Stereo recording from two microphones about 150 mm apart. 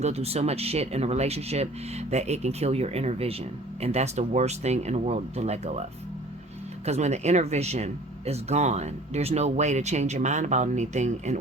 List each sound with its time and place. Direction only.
0.0 s speech: 45° right (ahead or behind)
6.8 s speech: 45° right (ahead or behind)